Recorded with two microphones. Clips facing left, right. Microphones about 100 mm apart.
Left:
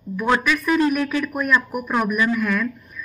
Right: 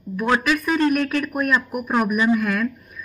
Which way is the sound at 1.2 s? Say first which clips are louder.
Left 1 dB; 10° right (ahead or behind).